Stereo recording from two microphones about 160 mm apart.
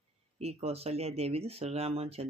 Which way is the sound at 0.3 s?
40° right (ahead or behind).